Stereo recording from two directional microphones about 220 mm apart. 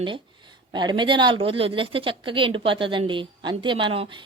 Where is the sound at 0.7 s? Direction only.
20° right (ahead or behind).